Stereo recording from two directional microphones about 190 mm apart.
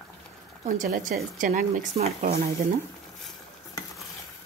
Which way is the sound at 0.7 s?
45° right (ahead or behind).